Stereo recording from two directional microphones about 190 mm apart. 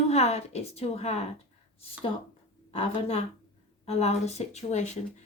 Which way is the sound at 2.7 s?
35° left (ahead or behind).